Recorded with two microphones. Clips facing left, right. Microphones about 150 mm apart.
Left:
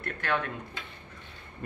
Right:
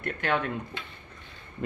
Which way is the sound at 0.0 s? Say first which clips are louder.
Right 3 dB; 15° right (ahead or behind).